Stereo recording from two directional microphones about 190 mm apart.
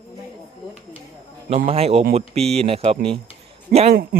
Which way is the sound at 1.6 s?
30° right (ahead or behind).